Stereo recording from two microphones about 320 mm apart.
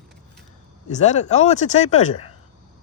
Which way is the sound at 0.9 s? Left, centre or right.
Left.